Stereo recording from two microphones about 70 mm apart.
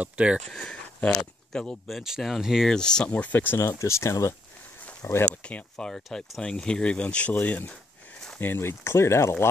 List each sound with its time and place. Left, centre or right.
0.0 s speech: centre
0.5 s speech: centre
1.9 s speech: centre
2.7 s speech: centre
3.1 s speech: left
3.6 s speech: left
5.4 s speech: centre; by 9.3 s left